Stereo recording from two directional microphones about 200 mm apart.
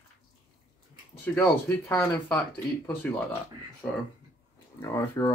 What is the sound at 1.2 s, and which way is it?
A man's voice, 5° left (ahead or behind).